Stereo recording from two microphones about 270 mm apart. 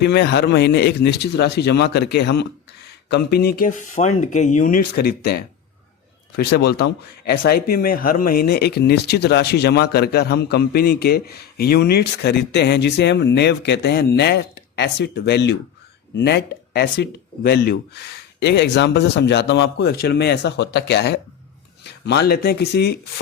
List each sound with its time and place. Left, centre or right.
0.1 s a man's voice: left